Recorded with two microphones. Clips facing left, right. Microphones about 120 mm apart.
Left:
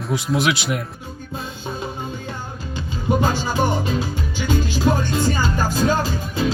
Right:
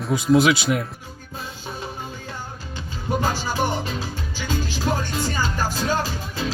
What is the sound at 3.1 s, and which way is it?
Music, 20° left (ahead or behind).